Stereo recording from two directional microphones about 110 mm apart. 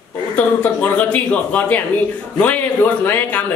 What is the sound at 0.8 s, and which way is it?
Speech, 10° left (ahead or behind).